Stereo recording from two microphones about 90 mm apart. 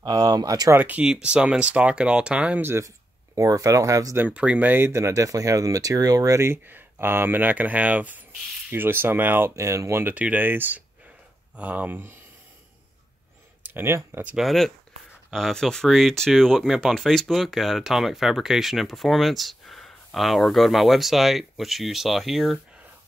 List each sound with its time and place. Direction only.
0.0 s speech: 45° right (ahead or behind)
0.7 s speech: 20° right (ahead or behind)
2.6 s speech: 30° right (ahead or behind)
3.3 s speech: 40° right (ahead or behind)
4.2 s speech: 15° right (ahead or behind); by 10.1 s 30° right (ahead or behind)
10.1 s speech: 20° right (ahead or behind)
13.7 s speech: 25° right (ahead or behind)
14.2 s speech: 5° right (ahead or behind)